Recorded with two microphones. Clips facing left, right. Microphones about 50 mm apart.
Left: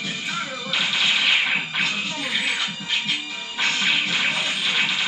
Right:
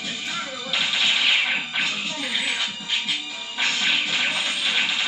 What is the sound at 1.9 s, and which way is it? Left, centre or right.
Music, centre.